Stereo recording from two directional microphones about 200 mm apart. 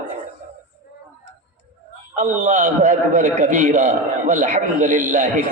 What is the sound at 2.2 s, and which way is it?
A man's voice, 40° right (ahead or behind).